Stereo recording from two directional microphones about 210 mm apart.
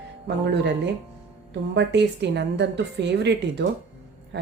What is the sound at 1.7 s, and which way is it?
A woman's voice, 55° right (ahead or behind).